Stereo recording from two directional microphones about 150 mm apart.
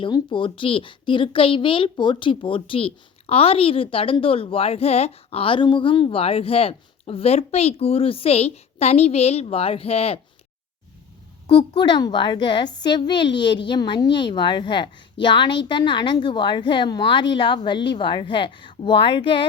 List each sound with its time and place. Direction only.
0.0 s speech: 30° left (ahead or behind)
11.5 s speech: 30° left (ahead or behind)